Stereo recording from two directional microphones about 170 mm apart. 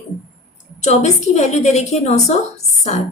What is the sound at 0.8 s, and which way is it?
A woman's voice, 45° left (ahead or behind).